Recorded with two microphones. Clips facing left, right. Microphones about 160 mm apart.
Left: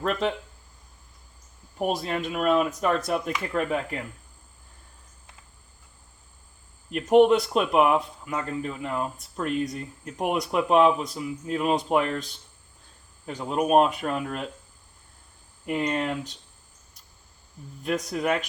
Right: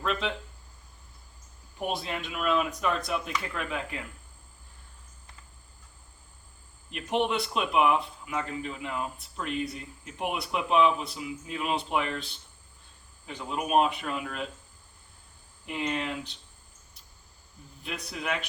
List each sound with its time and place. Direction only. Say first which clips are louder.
0.0 s speech: left 5 dB; 40° left (ahead or behind)
1.8 s speech: left 6 dB; 40° left (ahead or behind)
6.9 s speech: left 11 dB; 45° left (ahead or behind)
13.2 s speech: left 7 dB; 45° left (ahead or behind)
15.6 s speech: left 5 dB; 45° left (ahead or behind)
17.8 s speech: left 9 dB; 45° left (ahead or behind)